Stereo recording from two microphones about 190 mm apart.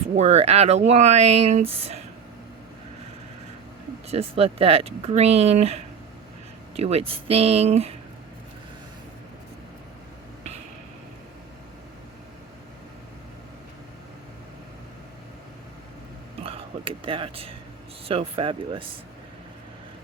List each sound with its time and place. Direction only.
0.2 s speech: 35° right (ahead or behind)
4.1 s speech: 30° right (ahead or behind)
16.4 s a sound: 30° right (ahead or behind)
18.1 s speech: 30° right (ahead or behind)